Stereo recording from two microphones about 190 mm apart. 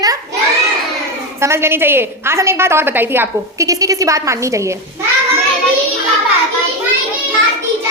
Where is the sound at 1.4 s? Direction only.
15° right (ahead or behind).